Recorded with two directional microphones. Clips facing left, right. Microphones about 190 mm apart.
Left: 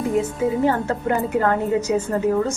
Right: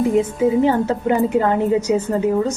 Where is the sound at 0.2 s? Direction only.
20° right (ahead or behind).